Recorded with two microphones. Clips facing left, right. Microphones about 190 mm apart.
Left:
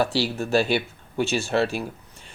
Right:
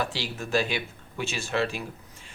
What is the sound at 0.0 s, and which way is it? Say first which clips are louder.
Speech: left 8 dB; 35° left (ahead or behind).